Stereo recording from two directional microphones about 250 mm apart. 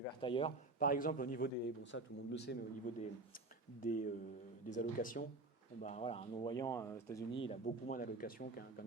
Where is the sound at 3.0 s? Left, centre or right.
Left; by 7.3 s centre.